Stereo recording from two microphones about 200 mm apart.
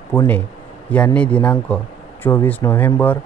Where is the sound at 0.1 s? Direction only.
10° left (ahead or behind).